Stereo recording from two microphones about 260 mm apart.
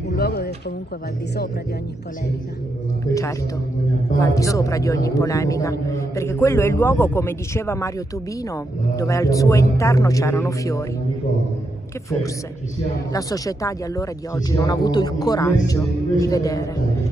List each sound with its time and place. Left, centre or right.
0.1 s a sound: left
3.1 s a man's voice: centre
8.9 s a man's voice: centre
13.1 s a man's voice: centre